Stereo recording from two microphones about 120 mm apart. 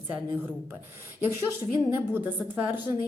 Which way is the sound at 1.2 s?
20° right (ahead or behind).